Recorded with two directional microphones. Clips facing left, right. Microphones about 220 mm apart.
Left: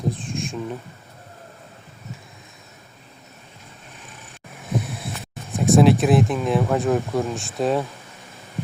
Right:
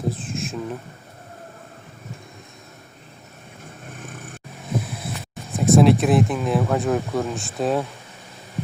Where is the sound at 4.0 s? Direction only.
50° right (ahead or behind).